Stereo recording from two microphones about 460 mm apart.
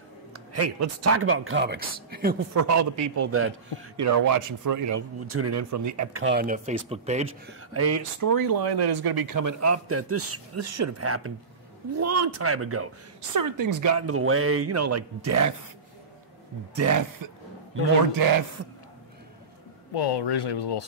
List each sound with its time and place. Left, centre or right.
0.3 s speech: right
2.5 s speech: right
4.0 s speech: right
6.2 s speech: centre
7.7 s speech: right
13.3 s speech: right
16.7 s speech: right
19.9 s speech: left